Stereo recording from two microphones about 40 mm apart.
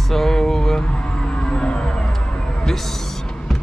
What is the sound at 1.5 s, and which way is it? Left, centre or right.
Music, left.